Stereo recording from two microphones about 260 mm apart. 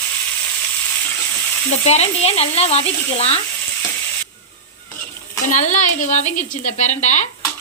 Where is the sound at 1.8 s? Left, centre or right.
Left.